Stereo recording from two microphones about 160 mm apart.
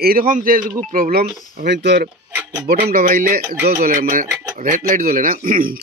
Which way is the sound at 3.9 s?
55° right (ahead or behind).